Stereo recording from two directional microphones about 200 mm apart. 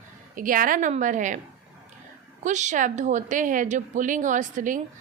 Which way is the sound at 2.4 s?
35° right (ahead or behind).